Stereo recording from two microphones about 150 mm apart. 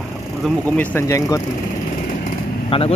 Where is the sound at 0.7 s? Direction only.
15° left (ahead or behind).